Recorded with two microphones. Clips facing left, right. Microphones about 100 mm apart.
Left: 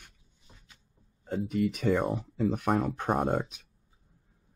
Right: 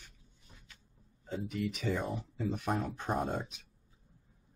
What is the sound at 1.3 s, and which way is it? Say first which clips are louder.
Speech: left 7 dB; 50° left (ahead or behind).